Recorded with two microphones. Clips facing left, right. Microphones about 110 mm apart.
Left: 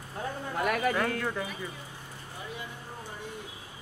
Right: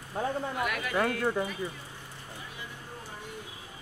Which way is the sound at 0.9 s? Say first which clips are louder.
Right 2 dB; 15° right (ahead or behind).